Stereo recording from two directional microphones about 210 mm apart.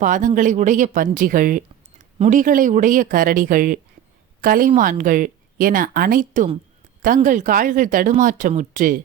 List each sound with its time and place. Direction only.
0.0 s speech: 35° right (ahead or behind)